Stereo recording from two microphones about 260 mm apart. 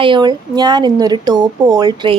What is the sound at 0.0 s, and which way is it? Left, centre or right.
A woman's voice, centre.